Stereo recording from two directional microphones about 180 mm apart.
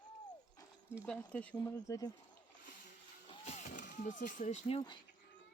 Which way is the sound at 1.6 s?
20° left (ahead or behind).